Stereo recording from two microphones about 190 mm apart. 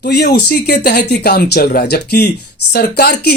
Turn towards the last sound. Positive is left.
turn(degrees=60)  # may be behind; listen again after turning